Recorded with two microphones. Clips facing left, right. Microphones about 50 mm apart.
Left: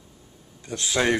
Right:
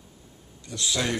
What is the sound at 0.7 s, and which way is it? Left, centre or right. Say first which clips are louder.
Speech: left 5 dB; left.